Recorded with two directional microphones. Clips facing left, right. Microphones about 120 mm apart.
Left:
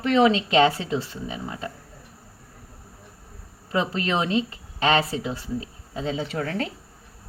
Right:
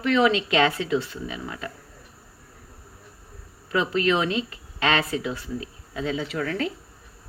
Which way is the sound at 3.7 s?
30° left (ahead or behind).